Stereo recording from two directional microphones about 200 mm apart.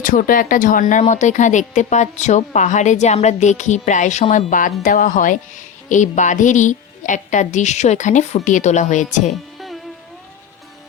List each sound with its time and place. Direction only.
0.0 s speech: 45° left (ahead or behind)
9.6 s music: centre (ahead or behind)